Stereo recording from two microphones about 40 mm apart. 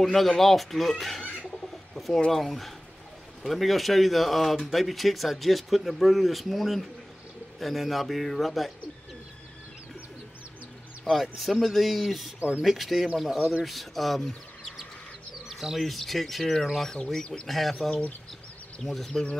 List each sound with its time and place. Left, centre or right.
0.0 s speech: centre
11.1 s speech: centre
12.4 s speech: right
12.6 s speech: centre
15.8 s speech: centre
16.9 s speech: centre
17.5 s speech: centre